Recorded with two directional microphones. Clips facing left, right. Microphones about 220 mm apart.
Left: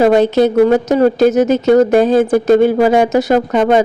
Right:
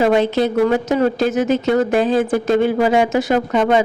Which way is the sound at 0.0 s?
40° left (ahead or behind).